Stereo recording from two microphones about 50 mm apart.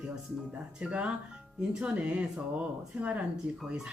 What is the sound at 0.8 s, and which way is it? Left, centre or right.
Speech, right.